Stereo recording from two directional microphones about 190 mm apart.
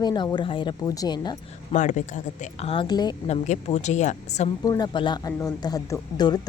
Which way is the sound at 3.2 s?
35° left (ahead or behind).